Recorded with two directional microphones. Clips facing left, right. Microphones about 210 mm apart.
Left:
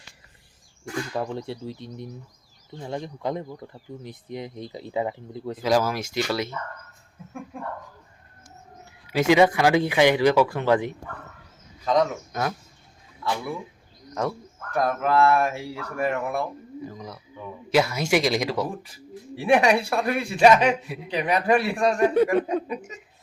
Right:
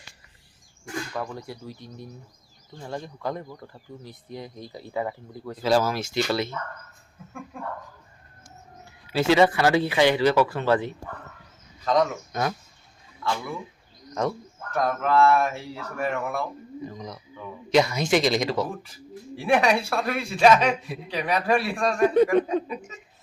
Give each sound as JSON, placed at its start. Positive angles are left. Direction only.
{"t": 1.1, "sound": "speech", "side_deg": 25}
{"t": 9.0, "sound": "speech", "side_deg": 15}